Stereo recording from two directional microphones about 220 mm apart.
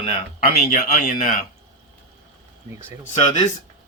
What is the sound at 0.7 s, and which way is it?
Speech, 40° left (ahead or behind).